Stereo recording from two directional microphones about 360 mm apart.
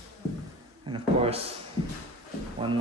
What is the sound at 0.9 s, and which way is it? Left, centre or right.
Beatboxing, centre.